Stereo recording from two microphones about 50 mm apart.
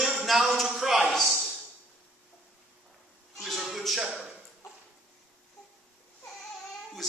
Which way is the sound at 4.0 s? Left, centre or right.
Centre.